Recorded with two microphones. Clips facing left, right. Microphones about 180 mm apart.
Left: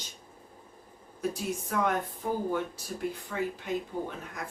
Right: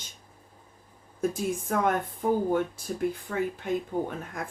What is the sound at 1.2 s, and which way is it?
Speech, 50° right (ahead or behind).